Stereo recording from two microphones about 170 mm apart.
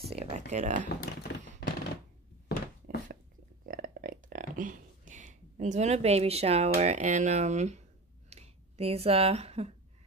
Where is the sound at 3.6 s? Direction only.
60° right (ahead or behind); by 6.7 s 40° right (ahead or behind).